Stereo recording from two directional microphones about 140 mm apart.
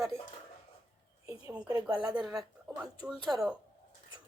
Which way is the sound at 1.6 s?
25° right (ahead or behind).